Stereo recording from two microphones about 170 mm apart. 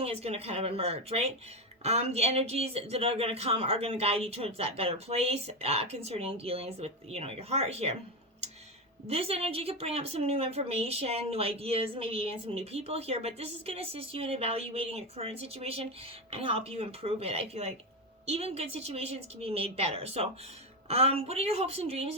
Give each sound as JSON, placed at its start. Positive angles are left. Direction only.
{"t": 0.0, "sound": "speech", "side_deg": -35}
{"t": 9.0, "sound": "speech", "side_deg": -35}